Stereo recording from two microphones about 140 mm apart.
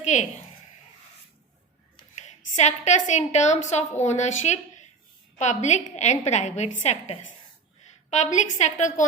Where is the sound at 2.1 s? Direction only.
55° left (ahead or behind).